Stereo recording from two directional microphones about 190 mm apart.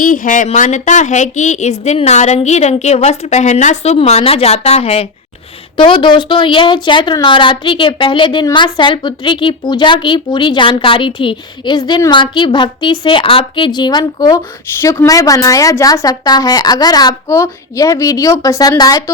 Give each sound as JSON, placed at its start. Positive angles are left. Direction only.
{"t": 0.0, "sound": "a woman's voice", "side_deg": 45}